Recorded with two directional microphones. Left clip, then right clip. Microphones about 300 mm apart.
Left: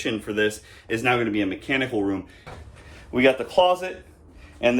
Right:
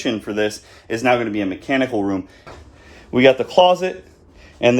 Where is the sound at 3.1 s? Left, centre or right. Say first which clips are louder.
Right 6 dB; right.